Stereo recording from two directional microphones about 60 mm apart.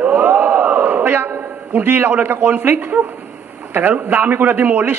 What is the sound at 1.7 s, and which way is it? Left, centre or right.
A man's voice, right.